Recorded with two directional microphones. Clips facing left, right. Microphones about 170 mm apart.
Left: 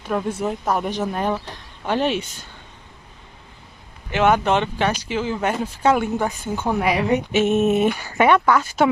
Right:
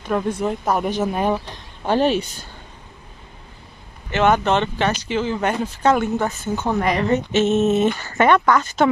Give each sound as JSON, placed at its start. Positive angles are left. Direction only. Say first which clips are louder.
{"t": 0.0, "sound": "speech", "louder": "right 2 dB", "side_deg": 5}
{"t": 1.1, "sound": "speech", "louder": "right 2 dB", "side_deg": -15}
{"t": 1.9, "sound": "speech", "louder": "right 3 dB", "side_deg": -35}
{"t": 4.1, "sound": "speech", "louder": "even", "side_deg": 5}